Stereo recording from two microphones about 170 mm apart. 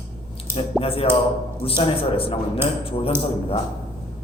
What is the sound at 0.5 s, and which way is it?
A man's voice, 35° left (ahead or behind).